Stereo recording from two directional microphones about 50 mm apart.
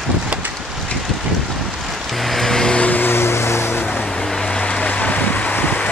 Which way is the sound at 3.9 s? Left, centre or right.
Centre.